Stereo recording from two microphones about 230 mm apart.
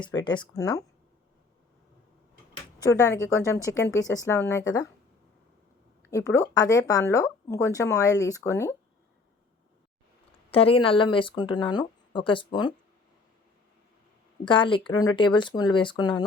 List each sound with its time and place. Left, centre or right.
0.0 s speech: centre
2.8 s speech: centre
6.0 s speech: centre
10.5 s speech: left
14.4 s speech: left